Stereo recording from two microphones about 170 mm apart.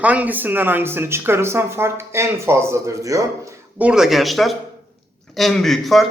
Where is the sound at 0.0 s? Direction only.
10° right (ahead or behind).